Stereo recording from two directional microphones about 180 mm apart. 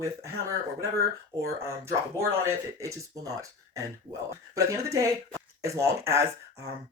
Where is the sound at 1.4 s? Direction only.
15° right (ahead or behind).